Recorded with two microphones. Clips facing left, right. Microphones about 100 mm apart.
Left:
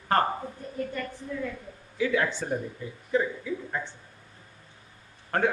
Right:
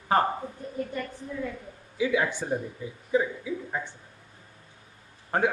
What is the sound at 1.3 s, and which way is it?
A man's voice, 20° right (ahead or behind).